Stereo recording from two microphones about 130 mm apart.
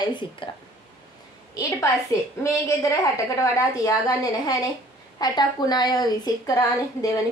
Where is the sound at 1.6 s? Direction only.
25° left (ahead or behind).